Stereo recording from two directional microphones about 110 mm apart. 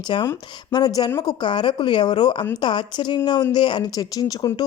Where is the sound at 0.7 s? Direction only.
40° left (ahead or behind).